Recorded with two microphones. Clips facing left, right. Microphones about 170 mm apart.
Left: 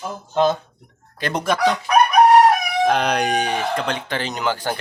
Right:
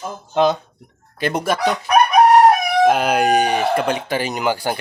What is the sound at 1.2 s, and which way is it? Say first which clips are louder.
Speech: even; 10° right (ahead or behind).